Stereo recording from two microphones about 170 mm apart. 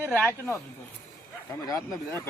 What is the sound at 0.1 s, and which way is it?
Speech, 5° left (ahead or behind).